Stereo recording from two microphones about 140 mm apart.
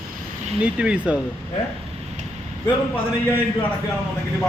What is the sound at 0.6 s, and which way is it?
Speech, 10° right (ahead or behind).